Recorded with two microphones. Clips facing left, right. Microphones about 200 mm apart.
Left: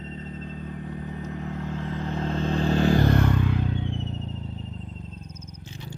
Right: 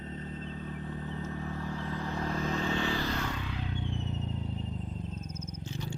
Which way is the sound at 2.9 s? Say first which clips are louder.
Left 12 dB; 55° left (ahead or behind).